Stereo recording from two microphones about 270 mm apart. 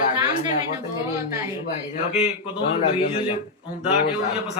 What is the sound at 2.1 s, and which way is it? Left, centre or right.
Speech, left.